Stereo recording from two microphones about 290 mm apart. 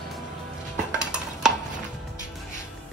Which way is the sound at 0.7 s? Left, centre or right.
Centre.